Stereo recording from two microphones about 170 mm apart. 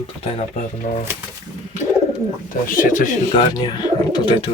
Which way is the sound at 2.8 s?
50° left (ahead or behind).